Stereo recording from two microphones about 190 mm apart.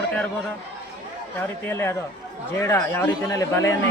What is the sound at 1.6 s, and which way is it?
Speech, 10° left (ahead or behind).